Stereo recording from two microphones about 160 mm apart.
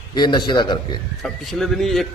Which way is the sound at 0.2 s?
25° left (ahead or behind).